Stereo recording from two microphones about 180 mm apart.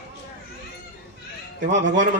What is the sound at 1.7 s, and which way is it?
Speech, 85° right.